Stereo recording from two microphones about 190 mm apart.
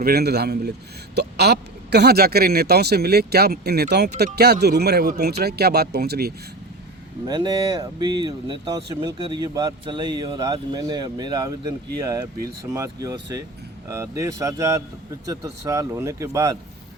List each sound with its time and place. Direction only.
0.0 s speech: 55° right (ahead or behind)
7.3 s speech: 20° right (ahead or behind)